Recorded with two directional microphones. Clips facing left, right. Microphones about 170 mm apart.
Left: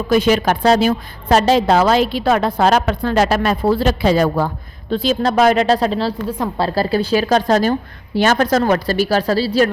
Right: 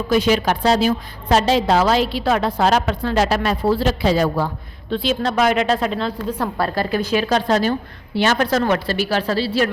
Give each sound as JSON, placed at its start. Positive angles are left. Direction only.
{"t": 0.1, "sound": "a woman's voice", "side_deg": 50}
{"t": 4.9, "sound": "a woman's voice", "side_deg": 40}